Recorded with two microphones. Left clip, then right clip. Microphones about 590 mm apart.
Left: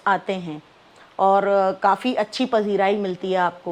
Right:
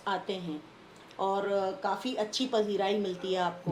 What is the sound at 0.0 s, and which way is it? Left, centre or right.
Speech, left.